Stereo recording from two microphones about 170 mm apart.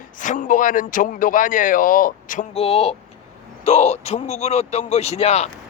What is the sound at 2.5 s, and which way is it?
Speech, 35° left (ahead or behind).